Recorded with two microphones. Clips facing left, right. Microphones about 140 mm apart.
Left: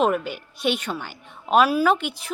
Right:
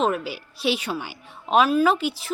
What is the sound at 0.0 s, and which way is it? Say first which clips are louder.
Speech: left 2 dB; centre (ahead or behind).